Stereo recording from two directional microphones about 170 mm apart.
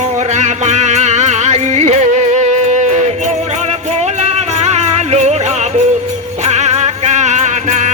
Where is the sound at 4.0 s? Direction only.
40° right (ahead or behind).